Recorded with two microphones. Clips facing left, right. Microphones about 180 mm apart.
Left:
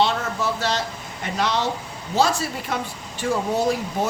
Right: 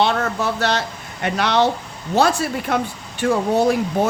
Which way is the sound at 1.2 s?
65° right (ahead or behind).